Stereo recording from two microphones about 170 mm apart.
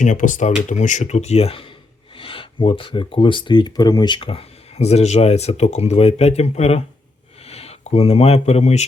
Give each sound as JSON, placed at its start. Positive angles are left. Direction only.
{"t": 0.0, "sound": "speech", "side_deg": 50}